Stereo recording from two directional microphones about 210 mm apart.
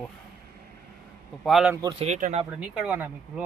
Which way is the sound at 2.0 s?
35° right (ahead or behind).